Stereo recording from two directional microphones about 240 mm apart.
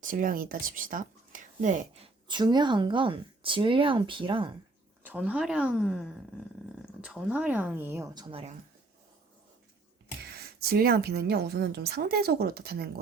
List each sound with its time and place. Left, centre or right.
0.0 s speech: right
2.2 s speech: centre
5.0 s a woman's voice: centre; by 8.5 s right
10.2 s speech: right